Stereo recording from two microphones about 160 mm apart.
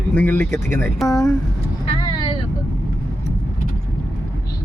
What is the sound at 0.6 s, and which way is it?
Speech, 60° right (ahead or behind).